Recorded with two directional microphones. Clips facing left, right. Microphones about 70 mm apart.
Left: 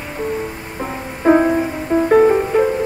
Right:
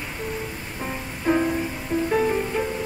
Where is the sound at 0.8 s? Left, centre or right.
Left.